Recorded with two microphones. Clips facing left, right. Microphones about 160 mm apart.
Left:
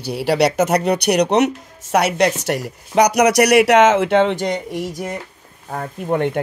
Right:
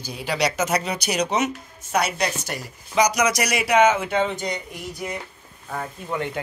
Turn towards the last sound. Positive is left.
turn(degrees=40)  # may be behind; listen again after turning